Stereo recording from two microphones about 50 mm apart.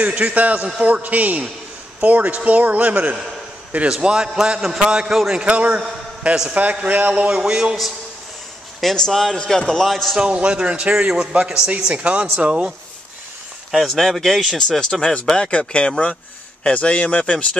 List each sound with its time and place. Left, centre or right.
0.0 s a man's voice: right
4.0 s a man's voice: centre; by 7.2 s right
7.2 s a man's voice: centre
8.8 s a man's voice: centre
10.1 s a man's voice: centre
13.7 s speech: centre; by 17.5 s left